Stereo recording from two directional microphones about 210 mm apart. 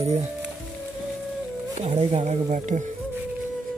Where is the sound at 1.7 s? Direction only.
30° right (ahead or behind).